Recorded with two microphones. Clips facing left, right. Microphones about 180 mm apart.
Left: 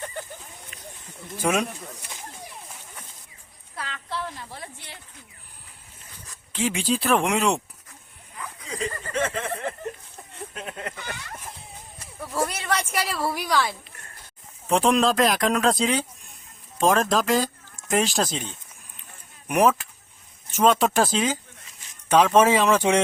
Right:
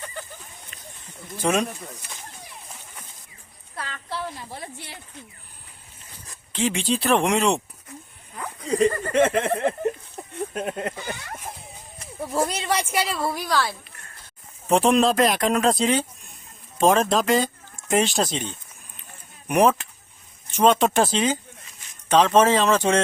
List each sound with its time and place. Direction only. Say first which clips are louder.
1.4 s a woman's voice: right 1 dB; 5° left (ahead or behind)
3.8 s a sound: right 1 dB; centre (ahead or behind)
6.5 s speech: right 1 dB; 5° left (ahead or behind)
8.4 s speech: right 11 dB; 55° right (ahead or behind)
10.5 s speech: right 6 dB; 40° right (ahead or behind); by 12.7 s 20° right (ahead or behind)
12.8 s a woman's voice: right 2 dB; centre (ahead or behind); by 13.7 s 15° left (ahead or behind)
14.7 s a woman's voice: right 2 dB; centre (ahead or behind)